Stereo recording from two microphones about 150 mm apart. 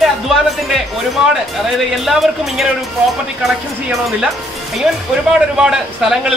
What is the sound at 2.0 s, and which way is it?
Speech, centre (ahead or behind).